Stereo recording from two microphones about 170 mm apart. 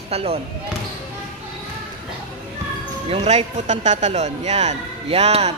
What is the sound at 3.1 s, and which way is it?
Speech, 40° right (ahead or behind).